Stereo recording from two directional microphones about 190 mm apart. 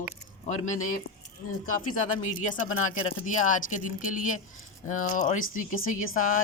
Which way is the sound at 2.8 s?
40° left (ahead or behind).